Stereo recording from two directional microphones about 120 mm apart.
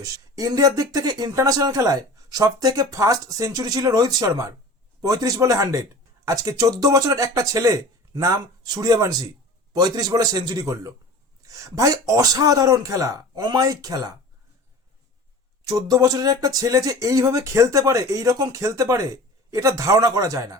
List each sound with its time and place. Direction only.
0.0 s speech: 30° right (ahead or behind)
15.6 s speech: 30° right (ahead or behind)